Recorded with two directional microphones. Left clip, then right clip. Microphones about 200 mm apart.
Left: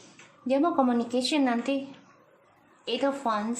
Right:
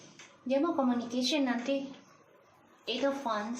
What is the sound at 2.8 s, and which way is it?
Speech, 30° left (ahead or behind).